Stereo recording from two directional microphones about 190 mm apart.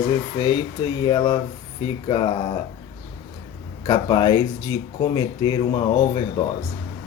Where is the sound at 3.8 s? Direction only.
20° left (ahead or behind).